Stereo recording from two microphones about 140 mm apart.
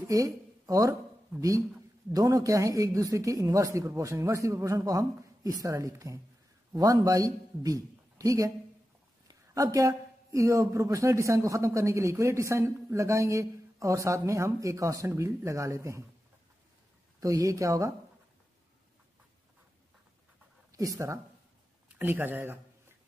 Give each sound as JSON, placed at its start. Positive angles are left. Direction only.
{"t": 0.0, "sound": "a sound", "side_deg": -25}
{"t": 2.1, "sound": "a man's voice", "side_deg": -25}
{"t": 17.2, "sound": "a man's voice", "side_deg": -25}
{"t": 20.7, "sound": "speech", "side_deg": -25}
{"t": 21.8, "sound": "speech", "side_deg": -10}